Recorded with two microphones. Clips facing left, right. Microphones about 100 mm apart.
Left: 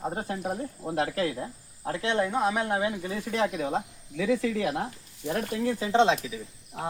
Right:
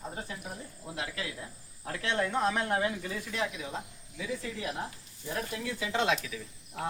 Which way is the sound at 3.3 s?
45° left (ahead or behind).